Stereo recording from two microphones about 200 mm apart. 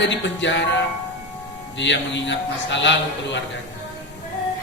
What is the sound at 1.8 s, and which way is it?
A man's voice, 65° left (ahead or behind).